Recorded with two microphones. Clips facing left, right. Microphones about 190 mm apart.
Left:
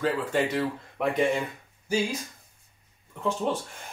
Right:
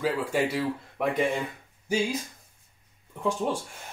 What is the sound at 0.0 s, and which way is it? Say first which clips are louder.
Speech: even; 10° right (ahead or behind).